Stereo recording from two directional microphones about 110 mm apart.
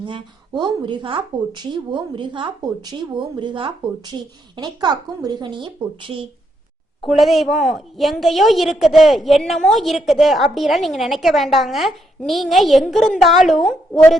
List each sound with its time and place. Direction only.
0.0 s speech: 45° right (ahead or behind)
7.0 s a woman's voice: centre (ahead or behind)